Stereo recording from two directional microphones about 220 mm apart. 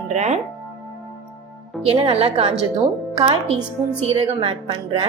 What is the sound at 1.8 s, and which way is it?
Speech, 25° right (ahead or behind).